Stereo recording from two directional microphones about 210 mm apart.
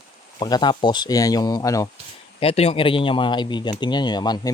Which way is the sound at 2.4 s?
30° left (ahead or behind).